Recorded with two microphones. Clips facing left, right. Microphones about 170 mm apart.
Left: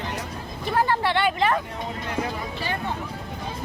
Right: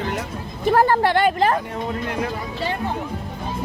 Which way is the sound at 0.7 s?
45° right (ahead or behind).